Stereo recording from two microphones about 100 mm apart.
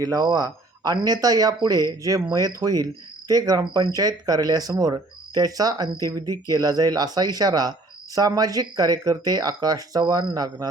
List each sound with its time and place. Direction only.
0.0 s speech: 40° right (ahead or behind)